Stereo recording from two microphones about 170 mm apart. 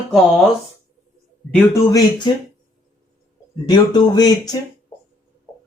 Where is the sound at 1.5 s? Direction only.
20° left (ahead or behind).